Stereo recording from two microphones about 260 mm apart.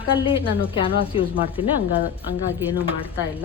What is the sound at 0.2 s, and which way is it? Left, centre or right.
A woman's voice, centre.